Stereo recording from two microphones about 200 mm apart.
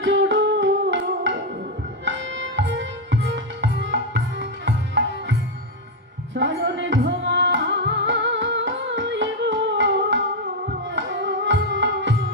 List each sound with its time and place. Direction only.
0.0 s music: 65° right (ahead or behind)
2.0 s tabla: 65° right (ahead or behind)
6.3 s music: 65° right (ahead or behind)